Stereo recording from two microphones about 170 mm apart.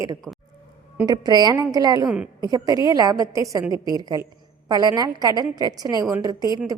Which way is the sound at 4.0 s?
20° right (ahead or behind).